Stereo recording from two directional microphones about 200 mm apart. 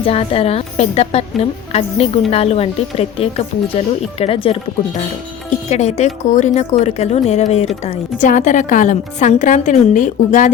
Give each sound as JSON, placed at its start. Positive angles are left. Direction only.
{"t": 0.0, "sound": "a woman's voice", "side_deg": 30}